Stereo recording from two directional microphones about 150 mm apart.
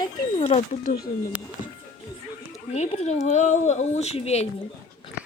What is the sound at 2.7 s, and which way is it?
Speech, 45° left (ahead or behind).